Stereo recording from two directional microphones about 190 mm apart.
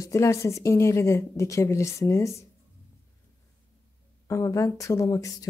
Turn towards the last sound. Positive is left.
turn(degrees=15)  # may be behind; listen again after turning